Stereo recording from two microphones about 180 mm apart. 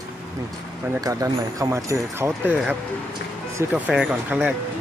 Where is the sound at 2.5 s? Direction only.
Centre (ahead or behind).